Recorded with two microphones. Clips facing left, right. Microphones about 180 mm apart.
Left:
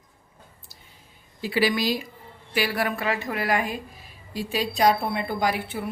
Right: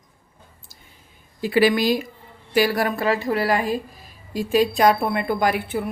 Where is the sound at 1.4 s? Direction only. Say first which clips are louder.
Right 6 dB; 50° right (ahead or behind); by 3.8 s 35° right (ahead or behind).